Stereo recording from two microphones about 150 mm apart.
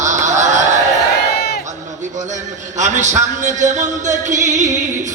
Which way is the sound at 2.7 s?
50° right (ahead or behind).